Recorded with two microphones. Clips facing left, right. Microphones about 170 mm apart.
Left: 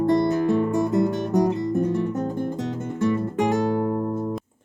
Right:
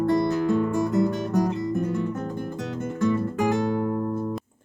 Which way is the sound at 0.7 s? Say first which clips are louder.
Left 2 dB; centre (ahead or behind).